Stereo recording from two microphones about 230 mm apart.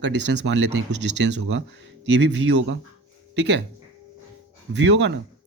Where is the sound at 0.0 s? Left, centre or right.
Right.